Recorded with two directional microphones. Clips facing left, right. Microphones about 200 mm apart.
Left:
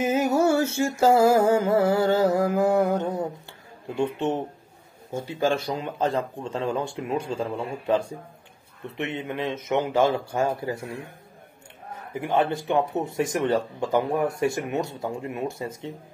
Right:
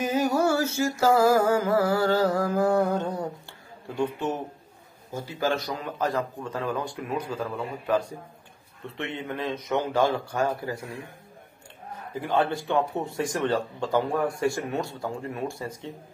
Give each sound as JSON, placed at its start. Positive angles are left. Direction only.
{"t": 0.0, "sound": "speech", "side_deg": 25}
{"t": 12.1, "sound": "speech", "side_deg": 20}